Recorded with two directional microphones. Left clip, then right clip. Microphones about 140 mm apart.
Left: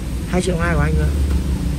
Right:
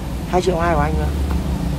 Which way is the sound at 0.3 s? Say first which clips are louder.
Right 3 dB; 25° right (ahead or behind).